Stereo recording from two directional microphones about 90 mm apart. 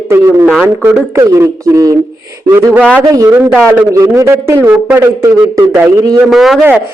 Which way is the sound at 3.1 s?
45° right (ahead or behind).